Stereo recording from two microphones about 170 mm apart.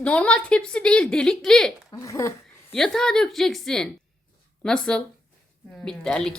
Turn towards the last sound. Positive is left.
turn(degrees=5)  # may be behind; listen again after turning